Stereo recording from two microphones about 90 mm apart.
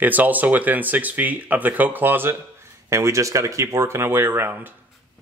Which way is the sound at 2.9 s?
35° right (ahead or behind).